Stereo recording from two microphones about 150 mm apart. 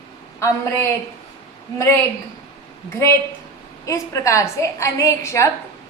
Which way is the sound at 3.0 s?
20° left (ahead or behind).